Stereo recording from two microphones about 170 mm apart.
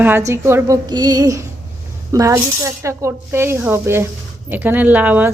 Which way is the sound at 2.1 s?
20° right (ahead or behind).